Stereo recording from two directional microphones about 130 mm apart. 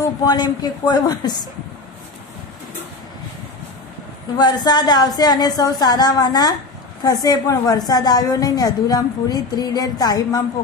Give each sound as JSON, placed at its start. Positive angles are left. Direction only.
{"t": 0.3, "sound": "a woman's voice", "side_deg": 30}
{"t": 4.4, "sound": "a woman's voice", "side_deg": 35}